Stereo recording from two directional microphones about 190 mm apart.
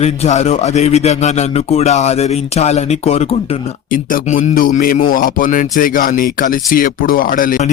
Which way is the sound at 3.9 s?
45° left (ahead or behind).